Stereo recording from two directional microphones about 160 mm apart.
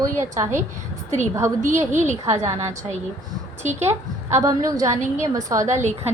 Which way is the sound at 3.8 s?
15° right (ahead or behind).